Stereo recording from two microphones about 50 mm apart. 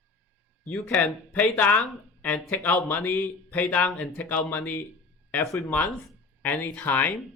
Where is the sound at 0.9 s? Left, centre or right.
Left.